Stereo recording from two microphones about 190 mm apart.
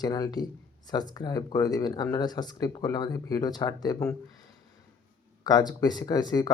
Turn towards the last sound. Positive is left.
turn(degrees=20)  # may be behind; listen again after turning